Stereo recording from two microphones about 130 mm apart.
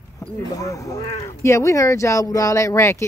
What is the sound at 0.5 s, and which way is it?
Speech, 25° left (ahead or behind).